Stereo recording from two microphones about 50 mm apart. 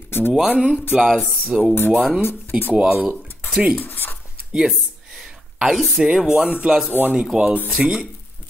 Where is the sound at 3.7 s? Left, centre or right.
Left.